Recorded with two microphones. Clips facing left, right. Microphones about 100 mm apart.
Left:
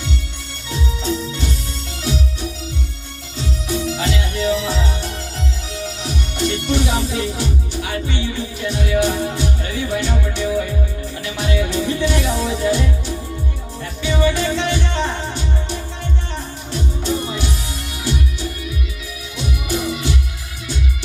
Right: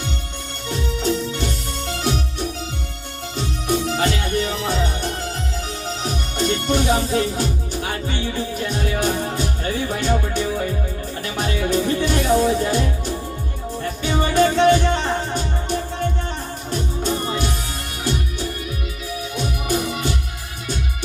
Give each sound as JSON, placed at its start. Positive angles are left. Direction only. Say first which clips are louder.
{"t": 0.7, "sound": "music", "louder": "right 1 dB", "side_deg": -50}
{"t": 1.9, "sound": "organ", "louder": "right 2 dB", "side_deg": -55}
{"t": 3.8, "sound": "music", "louder": "right 1 dB", "side_deg": -50}
{"t": 14.0, "sound": "music", "louder": "right 1 dB", "side_deg": -45}
{"t": 19.6, "sound": "music", "louder": "left 1 dB", "side_deg": -45}